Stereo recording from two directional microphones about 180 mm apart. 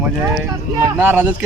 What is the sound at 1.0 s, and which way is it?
Speech, 10° right (ahead or behind).